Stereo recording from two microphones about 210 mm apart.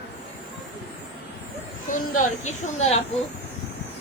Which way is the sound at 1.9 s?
40° left (ahead or behind).